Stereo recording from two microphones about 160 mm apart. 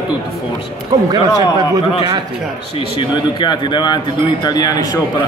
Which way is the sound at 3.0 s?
30° left (ahead or behind).